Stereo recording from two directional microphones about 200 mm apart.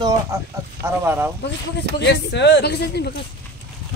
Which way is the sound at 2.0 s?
60° left (ahead or behind).